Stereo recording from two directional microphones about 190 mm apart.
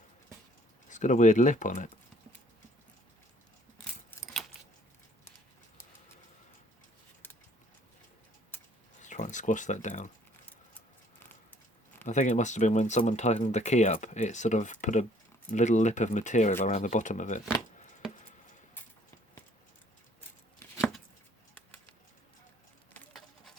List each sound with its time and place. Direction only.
0.9 s speech: 40° left (ahead or behind)
9.0 s speech: 40° left (ahead or behind)
12.0 s speech: 40° left (ahead or behind)
23.0 s a sound: centre (ahead or behind)